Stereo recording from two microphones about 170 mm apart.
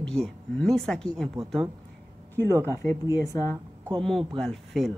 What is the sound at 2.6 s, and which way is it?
Speech, 15° left (ahead or behind).